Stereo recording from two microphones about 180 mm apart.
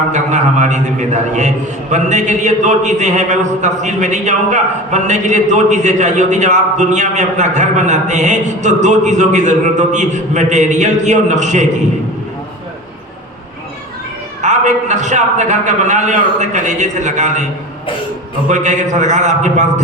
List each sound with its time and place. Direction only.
0.1 s a man's voice: 40° right (ahead or behind)
14.4 s a man's voice: 40° right (ahead or behind)
18.4 s a man's voice: 40° right (ahead or behind)